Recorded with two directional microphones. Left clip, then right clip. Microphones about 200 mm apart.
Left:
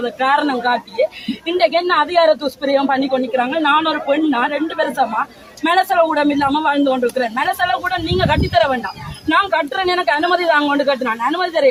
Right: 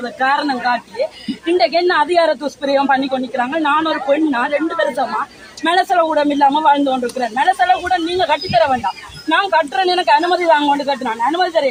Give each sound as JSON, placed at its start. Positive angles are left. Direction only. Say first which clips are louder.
{"t": 0.0, "sound": "a woman's voice", "louder": "left 1 dB", "side_deg": 30}